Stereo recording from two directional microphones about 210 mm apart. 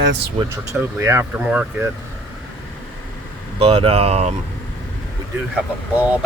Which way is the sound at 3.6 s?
25° right (ahead or behind).